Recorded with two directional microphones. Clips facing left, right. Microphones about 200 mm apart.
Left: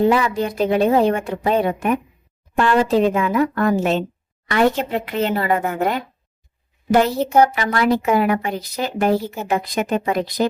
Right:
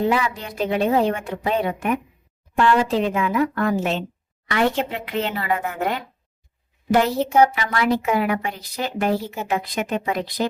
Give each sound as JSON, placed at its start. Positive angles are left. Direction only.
{"t": 0.1, "sound": "a woman's voice", "side_deg": 45}
{"t": 7.5, "sound": "a woman's voice", "side_deg": 45}
{"t": 9.2, "sound": "a woman's voice", "side_deg": 5}
{"t": 9.5, "sound": "a woman's voice", "side_deg": 45}